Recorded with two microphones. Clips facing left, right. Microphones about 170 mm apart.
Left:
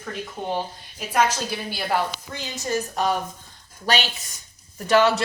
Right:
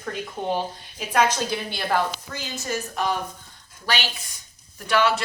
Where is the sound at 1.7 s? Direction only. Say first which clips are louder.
Left 1 dB; 10° left (ahead or behind).